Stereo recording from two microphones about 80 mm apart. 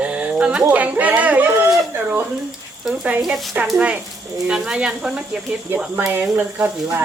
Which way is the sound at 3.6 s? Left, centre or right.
Right.